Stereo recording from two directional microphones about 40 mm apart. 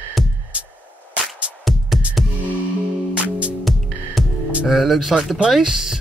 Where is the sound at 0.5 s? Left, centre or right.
Right.